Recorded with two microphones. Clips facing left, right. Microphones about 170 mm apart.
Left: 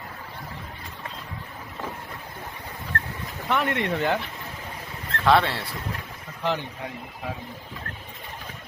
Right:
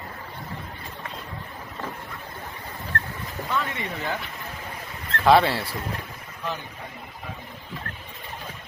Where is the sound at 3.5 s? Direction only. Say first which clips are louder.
Left 5 dB; 70° left (ahead or behind).